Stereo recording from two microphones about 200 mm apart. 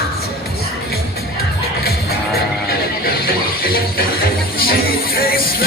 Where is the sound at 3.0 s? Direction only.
50° left (ahead or behind).